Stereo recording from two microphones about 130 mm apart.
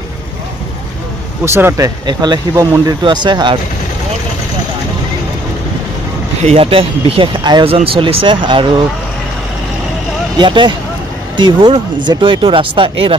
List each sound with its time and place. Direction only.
1.4 s speech: 20° right (ahead or behind)
2.0 s speech: 30° right (ahead or behind)
6.4 s speech: 45° right (ahead or behind)
10.4 s speech: 35° right (ahead or behind)